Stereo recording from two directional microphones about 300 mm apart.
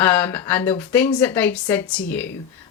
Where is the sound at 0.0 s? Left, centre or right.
Centre.